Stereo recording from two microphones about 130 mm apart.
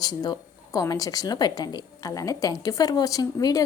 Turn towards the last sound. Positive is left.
turn(degrees=25)  # may be behind; listen again after turning